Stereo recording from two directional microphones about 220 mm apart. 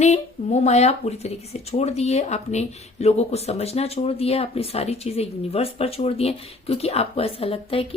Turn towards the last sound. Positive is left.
turn(degrees=25)  # may be behind; listen again after turning